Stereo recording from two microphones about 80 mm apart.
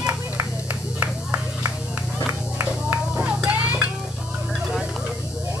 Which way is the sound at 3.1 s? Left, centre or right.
Centre.